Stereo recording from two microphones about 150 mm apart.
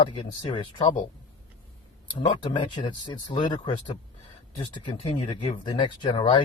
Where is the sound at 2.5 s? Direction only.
35° left (ahead or behind).